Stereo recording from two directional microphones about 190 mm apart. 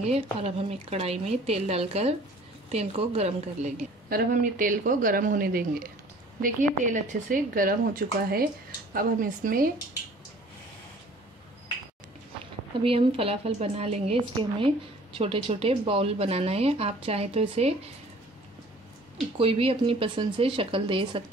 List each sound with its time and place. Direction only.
0.0 s speech: 35° right (ahead or behind)
4.1 s a woman's voice: 45° right (ahead or behind)
12.8 s speech: 30° right (ahead or behind)
19.3 s speech: 30° right (ahead or behind)